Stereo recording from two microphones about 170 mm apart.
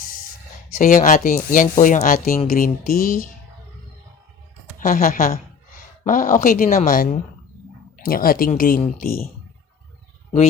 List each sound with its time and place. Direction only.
0.8 s speech: 50° left (ahead or behind)
4.8 s speech: 50° left (ahead or behind)